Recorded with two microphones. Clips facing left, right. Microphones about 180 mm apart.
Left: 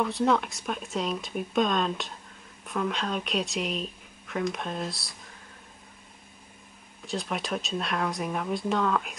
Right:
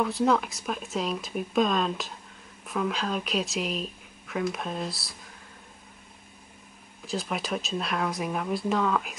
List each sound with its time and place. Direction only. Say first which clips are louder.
0.0 s speech: right 1 dB; centre (ahead or behind)
7.1 s speech: right 1 dB; centre (ahead or behind)